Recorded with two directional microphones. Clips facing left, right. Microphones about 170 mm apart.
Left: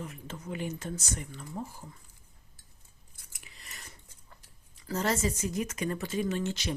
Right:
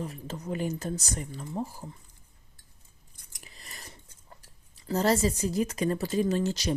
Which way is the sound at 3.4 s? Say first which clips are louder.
Right 3 dB; 35° right (ahead or behind).